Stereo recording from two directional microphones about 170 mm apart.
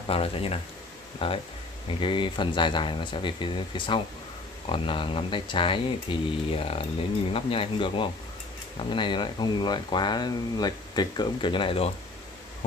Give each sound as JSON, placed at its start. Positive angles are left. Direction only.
{"t": 0.1, "sound": "speech", "side_deg": 35}